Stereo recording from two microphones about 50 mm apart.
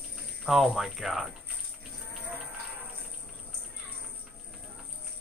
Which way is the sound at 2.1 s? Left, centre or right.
Right.